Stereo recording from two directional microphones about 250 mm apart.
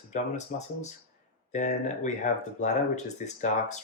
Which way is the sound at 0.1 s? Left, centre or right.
Left.